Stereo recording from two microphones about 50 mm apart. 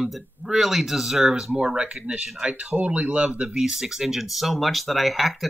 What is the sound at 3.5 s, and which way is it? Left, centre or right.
Speech, centre.